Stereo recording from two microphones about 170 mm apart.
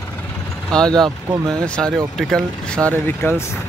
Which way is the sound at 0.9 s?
25° right (ahead or behind).